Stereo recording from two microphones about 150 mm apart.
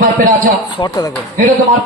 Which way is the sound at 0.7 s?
25° left (ahead or behind).